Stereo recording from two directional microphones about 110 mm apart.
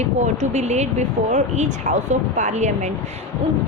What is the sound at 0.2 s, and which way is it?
Speech, 90° right.